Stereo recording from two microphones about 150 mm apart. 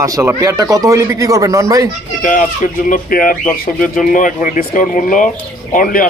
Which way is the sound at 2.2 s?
60° left (ahead or behind).